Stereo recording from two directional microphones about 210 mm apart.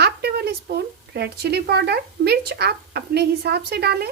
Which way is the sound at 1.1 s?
50° right (ahead or behind).